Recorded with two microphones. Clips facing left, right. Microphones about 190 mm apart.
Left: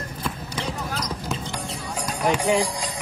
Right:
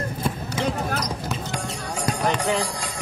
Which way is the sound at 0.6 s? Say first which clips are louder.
Right 5 dB; 60° right (ahead or behind).